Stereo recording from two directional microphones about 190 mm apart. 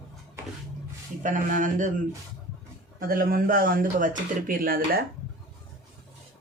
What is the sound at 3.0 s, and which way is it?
Speech, 50° right (ahead or behind).